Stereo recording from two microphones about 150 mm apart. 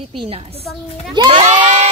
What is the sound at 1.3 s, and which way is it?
Sheep, 45° right (ahead or behind).